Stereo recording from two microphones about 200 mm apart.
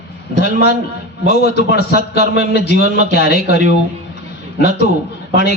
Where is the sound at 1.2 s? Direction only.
55° left (ahead or behind).